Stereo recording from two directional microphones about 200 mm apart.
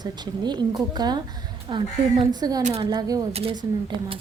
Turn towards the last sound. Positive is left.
turn(degrees=-25)  # may be behind; listen again after turning